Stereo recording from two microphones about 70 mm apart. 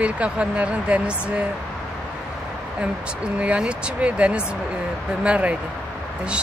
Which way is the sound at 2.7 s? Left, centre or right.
Centre.